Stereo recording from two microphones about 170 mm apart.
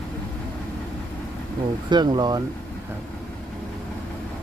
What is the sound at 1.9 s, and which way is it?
Speech, 25° right (ahead or behind).